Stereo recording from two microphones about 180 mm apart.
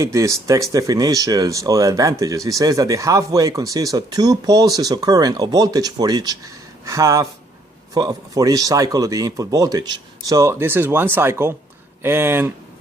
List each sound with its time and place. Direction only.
0.0 s speech: 15° right (ahead or behind)